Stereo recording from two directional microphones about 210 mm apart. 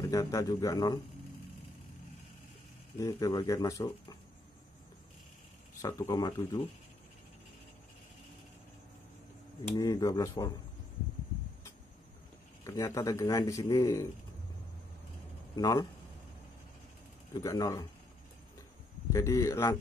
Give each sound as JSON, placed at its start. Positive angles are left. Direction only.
{"t": 0.0, "sound": "speech", "side_deg": 15}
{"t": 3.0, "sound": "speech", "side_deg": 15}
{"t": 5.8, "sound": "speech", "side_deg": 15}
{"t": 9.8, "sound": "speech", "side_deg": 15}
{"t": 12.6, "sound": "speech", "side_deg": 15}
{"t": 15.5, "sound": "speech", "side_deg": 15}
{"t": 17.3, "sound": "speech", "side_deg": 15}
{"t": 19.1, "sound": "speech", "side_deg": 15}